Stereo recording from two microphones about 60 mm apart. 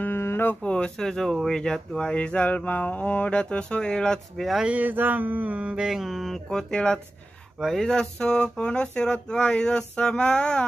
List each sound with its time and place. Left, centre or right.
0.0 s a sound: left
0.6 s speech: centre
4.6 s mantra: right; by 6.4 s centre
6.5 s speech: centre